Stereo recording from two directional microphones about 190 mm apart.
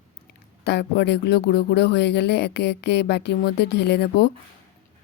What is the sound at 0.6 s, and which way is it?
Speech, 60° left (ahead or behind).